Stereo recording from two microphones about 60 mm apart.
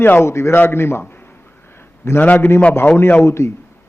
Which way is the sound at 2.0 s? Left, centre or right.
Left.